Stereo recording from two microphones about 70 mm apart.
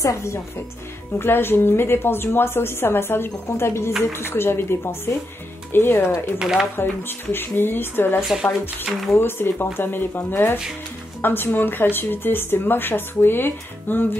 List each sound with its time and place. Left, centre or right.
0.0 s speech: left
1.1 s speech: left
6.3 s speech: centre
6.8 s speech: left